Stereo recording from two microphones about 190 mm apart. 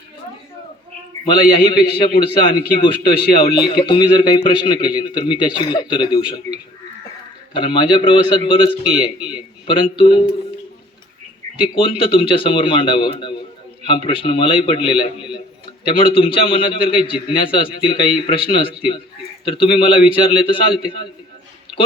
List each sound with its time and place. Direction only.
1.2 s a man's voice: 25° left (ahead or behind)
3.0 s speech: 55° left (ahead or behind)
3.7 s a man's voice: 25° left (ahead or behind)
11.6 s a man's voice: 30° left (ahead or behind)